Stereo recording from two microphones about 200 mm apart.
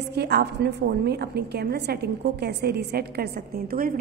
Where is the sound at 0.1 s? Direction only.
55° right (ahead or behind).